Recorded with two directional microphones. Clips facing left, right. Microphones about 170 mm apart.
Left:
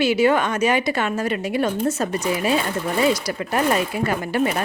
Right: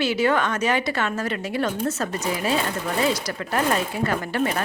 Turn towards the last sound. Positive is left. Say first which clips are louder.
# left 2 dB
turn(degrees=15)  # may be behind; listen again after turning